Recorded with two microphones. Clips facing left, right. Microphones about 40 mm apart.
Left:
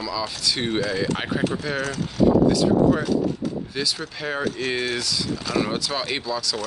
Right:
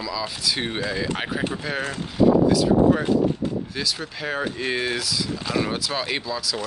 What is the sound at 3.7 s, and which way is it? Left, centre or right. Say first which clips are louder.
Speech: left 1 dB; centre.